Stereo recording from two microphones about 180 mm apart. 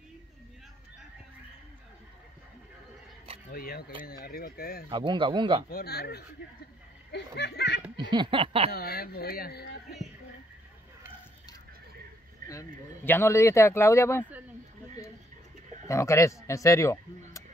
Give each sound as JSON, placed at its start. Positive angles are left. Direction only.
{"t": 3.5, "sound": "speech", "side_deg": 55}
{"t": 4.8, "sound": "speech", "side_deg": -25}
{"t": 5.7, "sound": "speech", "side_deg": 60}
{"t": 8.0, "sound": "a sound", "side_deg": -25}
{"t": 8.7, "sound": "speech", "side_deg": 55}
{"t": 12.4, "sound": "speech", "side_deg": 15}
{"t": 15.9, "sound": "speech", "side_deg": 15}